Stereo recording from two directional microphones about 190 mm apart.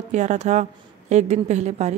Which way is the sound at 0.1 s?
40° right (ahead or behind).